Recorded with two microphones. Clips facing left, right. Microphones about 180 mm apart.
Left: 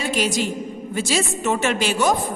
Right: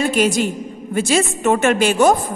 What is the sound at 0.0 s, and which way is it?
A woman's voice, 50° right (ahead or behind).